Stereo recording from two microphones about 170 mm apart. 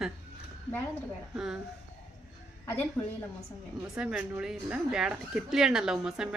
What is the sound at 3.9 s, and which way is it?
Speech, 5° right (ahead or behind).